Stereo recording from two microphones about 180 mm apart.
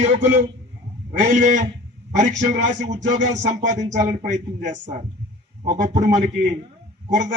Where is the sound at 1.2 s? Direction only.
45° right (ahead or behind).